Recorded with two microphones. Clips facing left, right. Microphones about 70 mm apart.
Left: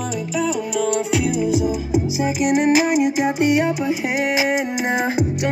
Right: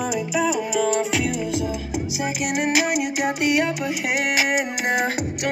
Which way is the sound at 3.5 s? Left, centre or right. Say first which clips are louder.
Left 3 dB; left.